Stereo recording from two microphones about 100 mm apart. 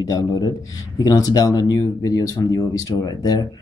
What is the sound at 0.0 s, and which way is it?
Speech, 35° left (ahead or behind).